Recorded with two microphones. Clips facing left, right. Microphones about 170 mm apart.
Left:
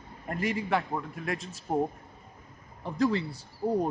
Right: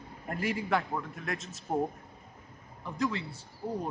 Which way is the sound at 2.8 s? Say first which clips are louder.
Left 6 dB; 35° left (ahead or behind).